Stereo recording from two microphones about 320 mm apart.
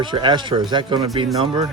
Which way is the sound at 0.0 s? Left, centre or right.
Centre.